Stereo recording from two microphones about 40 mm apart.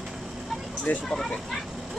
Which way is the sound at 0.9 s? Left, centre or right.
Left.